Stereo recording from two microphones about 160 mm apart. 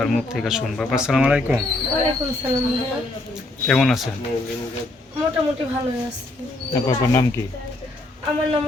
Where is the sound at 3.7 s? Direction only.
5° left (ahead or behind).